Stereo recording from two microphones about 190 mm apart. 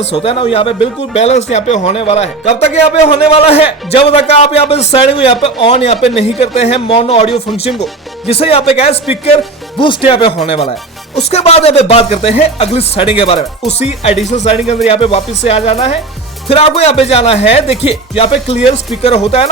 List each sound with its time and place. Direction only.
0.0 s a man's voice: 30° left (ahead or behind)